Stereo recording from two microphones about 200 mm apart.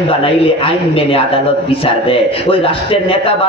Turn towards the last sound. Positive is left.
turn(degrees=30)  # may be behind; listen again after turning